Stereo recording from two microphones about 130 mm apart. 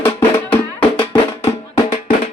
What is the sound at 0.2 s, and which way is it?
Music, 15° left (ahead or behind).